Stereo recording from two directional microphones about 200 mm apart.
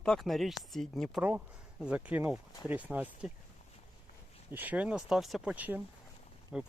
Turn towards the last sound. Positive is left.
turn(degrees=-5)  # may be behind; listen again after turning